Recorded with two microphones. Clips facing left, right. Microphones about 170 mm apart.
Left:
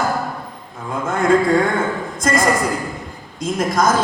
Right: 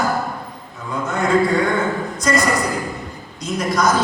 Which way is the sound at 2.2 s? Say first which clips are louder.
Left 1 dB; 50° left (ahead or behind).